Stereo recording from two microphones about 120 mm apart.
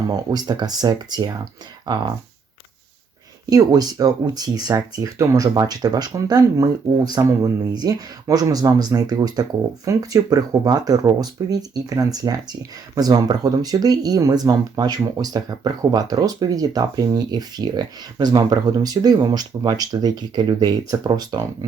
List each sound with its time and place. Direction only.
0.1 s speech: 35° right (ahead or behind)
3.5 s speech: 30° right (ahead or behind)